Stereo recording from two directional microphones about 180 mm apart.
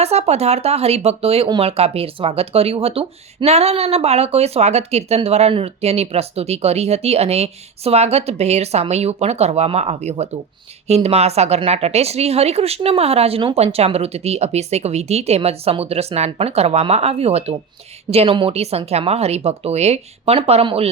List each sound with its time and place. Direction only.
0.0 s speech: 35° right (ahead or behind)